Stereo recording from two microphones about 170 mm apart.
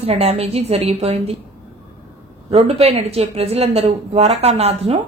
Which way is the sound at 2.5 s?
35° right (ahead or behind).